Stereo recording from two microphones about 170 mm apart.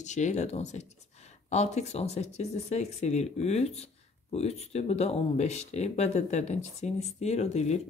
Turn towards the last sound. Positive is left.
turn(degrees=40)  # may be behind; listen again after turning